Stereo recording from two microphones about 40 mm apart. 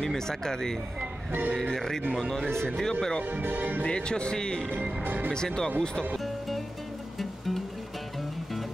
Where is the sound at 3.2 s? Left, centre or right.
Right.